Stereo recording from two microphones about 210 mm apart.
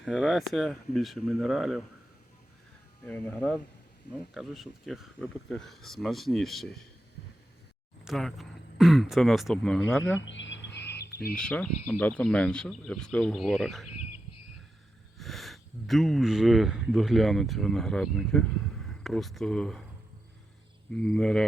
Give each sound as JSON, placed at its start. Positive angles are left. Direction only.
{"t": 0.0, "sound": "speech", "side_deg": -5}
{"t": 3.0, "sound": "speech", "side_deg": 10}
{"t": 8.0, "sound": "speech", "side_deg": 0}
{"t": 10.2, "sound": "bird", "side_deg": 60}
{"t": 11.3, "sound": "speech", "side_deg": 5}
{"t": 15.2, "sound": "speech", "side_deg": 0}
{"t": 20.9, "sound": "speech", "side_deg": 5}